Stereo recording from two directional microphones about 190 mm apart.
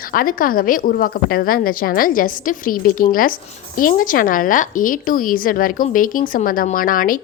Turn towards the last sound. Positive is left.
turn(degrees=45)  # may be behind; listen again after turning